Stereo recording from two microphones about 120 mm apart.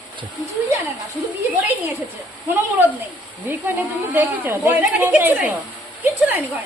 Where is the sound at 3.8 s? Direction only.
15° right (ahead or behind).